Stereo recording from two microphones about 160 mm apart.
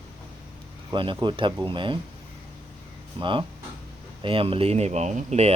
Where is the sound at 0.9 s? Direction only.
30° right (ahead or behind).